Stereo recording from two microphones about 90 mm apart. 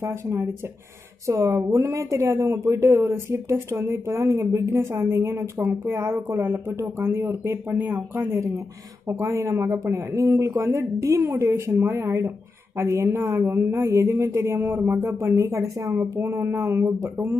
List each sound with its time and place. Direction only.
0.0 s speech: 30° right (ahead or behind)
8.2 s speech: 35° right (ahead or behind)